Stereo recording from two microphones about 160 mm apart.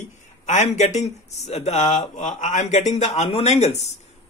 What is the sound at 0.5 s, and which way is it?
A man's voice, 45° left (ahead or behind).